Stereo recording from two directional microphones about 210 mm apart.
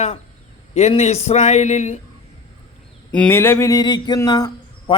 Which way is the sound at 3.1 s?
5° left (ahead or behind).